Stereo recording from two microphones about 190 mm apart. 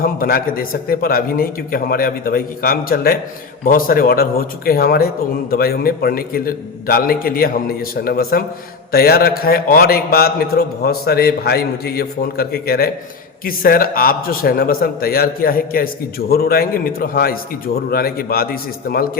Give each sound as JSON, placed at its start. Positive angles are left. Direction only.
{"t": 0.0, "sound": "speech", "side_deg": 50}